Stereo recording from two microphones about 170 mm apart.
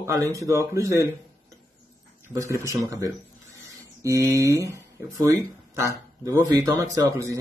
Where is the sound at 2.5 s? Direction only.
15° right (ahead or behind).